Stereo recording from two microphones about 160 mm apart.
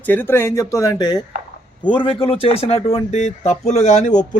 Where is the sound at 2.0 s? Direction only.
35° left (ahead or behind).